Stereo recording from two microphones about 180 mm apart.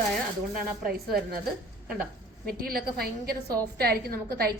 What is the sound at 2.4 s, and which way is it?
A woman's voice, 55° right (ahead or behind).